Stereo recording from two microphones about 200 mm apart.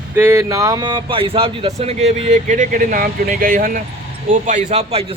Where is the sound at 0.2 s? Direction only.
10° right (ahead or behind).